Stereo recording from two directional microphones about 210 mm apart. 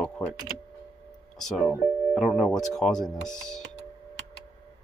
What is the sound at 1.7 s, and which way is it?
Speech, 5° right (ahead or behind).